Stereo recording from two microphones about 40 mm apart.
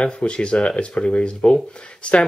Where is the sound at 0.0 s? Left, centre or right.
Left.